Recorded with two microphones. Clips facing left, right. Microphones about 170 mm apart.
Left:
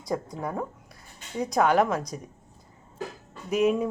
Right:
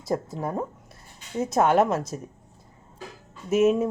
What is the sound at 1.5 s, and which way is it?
Speech, 25° right (ahead or behind).